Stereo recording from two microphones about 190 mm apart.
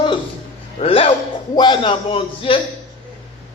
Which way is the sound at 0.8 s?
30° left (ahead or behind).